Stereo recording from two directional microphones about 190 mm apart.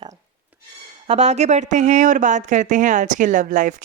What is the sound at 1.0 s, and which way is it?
Speech, 35° right (ahead or behind).